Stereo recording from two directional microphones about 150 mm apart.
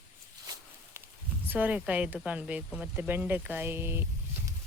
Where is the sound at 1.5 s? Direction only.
10° right (ahead or behind).